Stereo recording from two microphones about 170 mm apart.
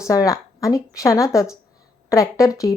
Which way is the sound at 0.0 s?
20° left (ahead or behind).